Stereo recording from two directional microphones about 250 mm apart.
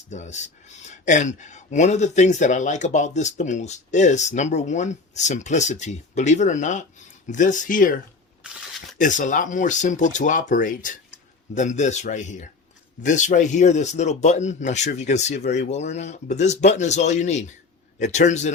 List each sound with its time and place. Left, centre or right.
0.1 s speech: left
9.0 s speech: left